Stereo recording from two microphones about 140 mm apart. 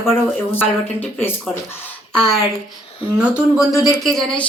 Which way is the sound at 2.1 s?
5° left (ahead or behind).